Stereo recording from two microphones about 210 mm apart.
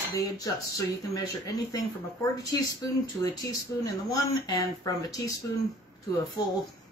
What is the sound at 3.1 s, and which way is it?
Speech, 15° left (ahead or behind).